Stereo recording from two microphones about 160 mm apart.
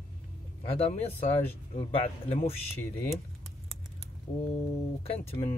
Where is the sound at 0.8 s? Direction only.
45° left (ahead or behind).